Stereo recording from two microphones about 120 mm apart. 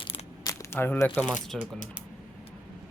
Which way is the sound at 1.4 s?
90° left.